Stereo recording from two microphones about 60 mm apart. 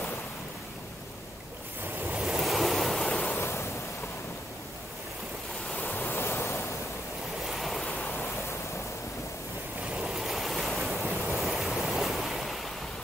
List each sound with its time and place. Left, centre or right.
2.2 s waves: centre
3.1 s waves: left
3.3 s waves: left
5.7 s waves: left
7.4 s waves: centre
9.9 s waves: centre